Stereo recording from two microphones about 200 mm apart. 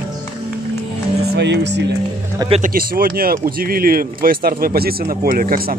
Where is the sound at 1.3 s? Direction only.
60° right (ahead or behind).